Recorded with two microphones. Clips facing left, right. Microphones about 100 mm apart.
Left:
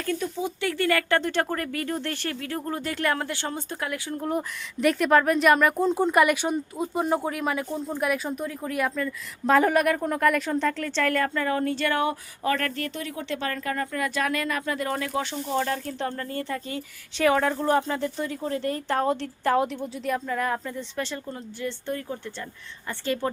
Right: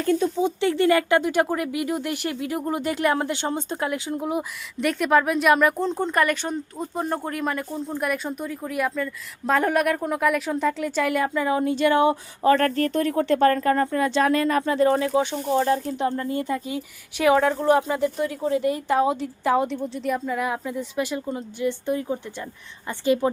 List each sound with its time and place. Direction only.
0.0 s speech: 25° right (ahead or behind)
4.3 s a woman's voice: 5° right (ahead or behind)